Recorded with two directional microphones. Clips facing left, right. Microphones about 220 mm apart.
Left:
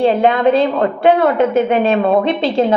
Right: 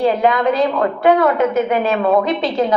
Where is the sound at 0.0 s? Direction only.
30° left (ahead or behind).